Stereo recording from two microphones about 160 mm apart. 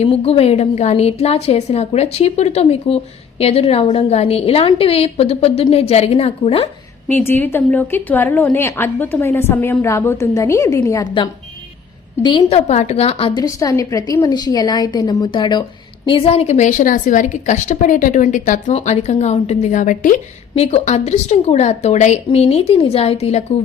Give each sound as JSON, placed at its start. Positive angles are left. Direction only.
{"t": 0.0, "sound": "a woman's voice", "side_deg": 35}
{"t": 7.1, "sound": "a woman's voice", "side_deg": 10}
{"t": 12.2, "sound": "a woman's voice", "side_deg": 30}
{"t": 13.4, "sound": "a woman's voice", "side_deg": 20}
{"t": 20.6, "sound": "a woman's voice", "side_deg": 40}